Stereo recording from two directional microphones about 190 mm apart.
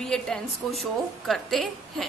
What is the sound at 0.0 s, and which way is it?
A woman's voice, 5° left (ahead or behind).